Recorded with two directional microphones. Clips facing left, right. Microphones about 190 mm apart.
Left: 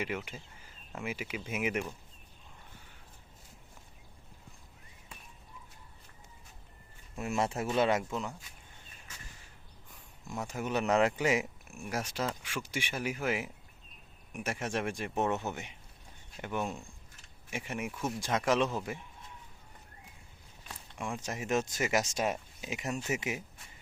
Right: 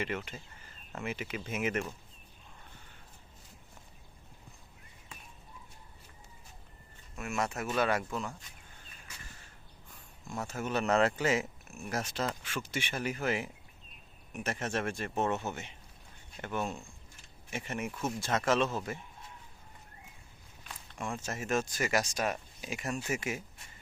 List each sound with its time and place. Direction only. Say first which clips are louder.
0.0 s speech: even; 10° left (ahead or behind)
7.2 s speech: left 2 dB; 30° left (ahead or behind)
10.3 s speech: even; 15° left (ahead or behind)
20.9 s speech: even; 15° left (ahead or behind)